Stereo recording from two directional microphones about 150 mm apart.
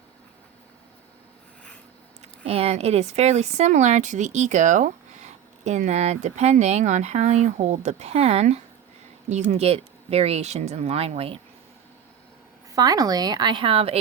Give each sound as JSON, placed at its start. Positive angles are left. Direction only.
{"t": 2.4, "sound": "speech", "side_deg": -40}
{"t": 12.7, "sound": "speech", "side_deg": -25}